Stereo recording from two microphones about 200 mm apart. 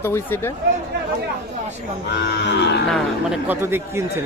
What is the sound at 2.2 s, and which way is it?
Cattle, 55° left (ahead or behind).